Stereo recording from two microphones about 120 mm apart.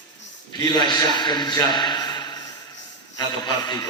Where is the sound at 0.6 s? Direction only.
35° left (ahead or behind).